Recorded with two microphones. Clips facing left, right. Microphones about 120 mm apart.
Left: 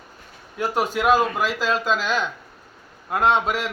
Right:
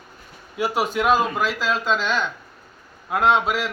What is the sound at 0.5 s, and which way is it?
A man's voice, 5° right (ahead or behind).